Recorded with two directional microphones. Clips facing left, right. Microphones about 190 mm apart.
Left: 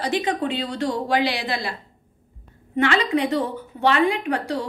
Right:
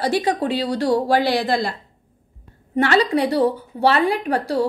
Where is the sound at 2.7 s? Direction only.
40° right (ahead or behind).